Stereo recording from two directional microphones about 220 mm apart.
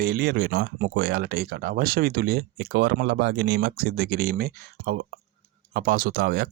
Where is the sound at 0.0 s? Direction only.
45° right (ahead or behind).